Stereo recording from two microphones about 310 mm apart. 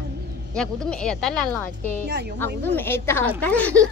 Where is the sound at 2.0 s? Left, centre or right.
Right.